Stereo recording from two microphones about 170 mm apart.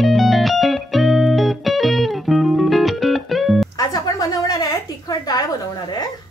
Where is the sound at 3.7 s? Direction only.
25° left (ahead or behind).